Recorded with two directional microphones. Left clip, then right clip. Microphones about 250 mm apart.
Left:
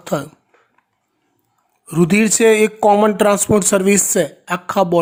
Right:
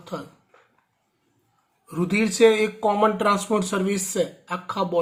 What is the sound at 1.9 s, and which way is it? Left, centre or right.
Speech, left.